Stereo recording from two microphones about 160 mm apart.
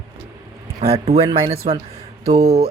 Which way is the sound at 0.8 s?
40° right (ahead or behind).